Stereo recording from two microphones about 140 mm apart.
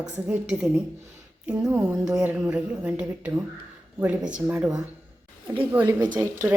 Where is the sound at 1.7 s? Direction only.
10° right (ahead or behind).